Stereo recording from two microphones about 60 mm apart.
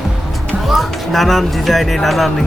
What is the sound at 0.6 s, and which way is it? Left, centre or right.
Speech, centre.